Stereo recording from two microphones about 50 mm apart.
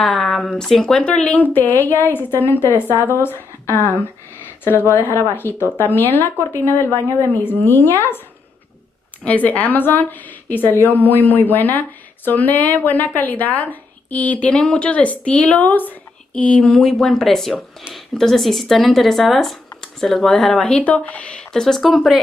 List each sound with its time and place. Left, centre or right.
0.0 s speech: centre
1.3 s speech: left
7.3 s speech: left
9.2 s a woman's voice: left
17.0 s speech: centre
20.6 s a woman's voice: left
21.5 s speech: centre
21.8 s speech: centre